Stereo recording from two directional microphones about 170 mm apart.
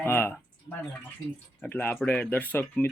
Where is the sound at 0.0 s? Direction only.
10° left (ahead or behind).